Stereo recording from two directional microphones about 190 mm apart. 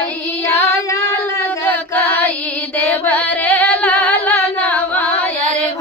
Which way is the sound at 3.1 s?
10° left (ahead or behind).